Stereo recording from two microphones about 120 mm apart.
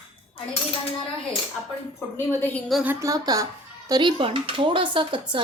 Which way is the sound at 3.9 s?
40° right (ahead or behind).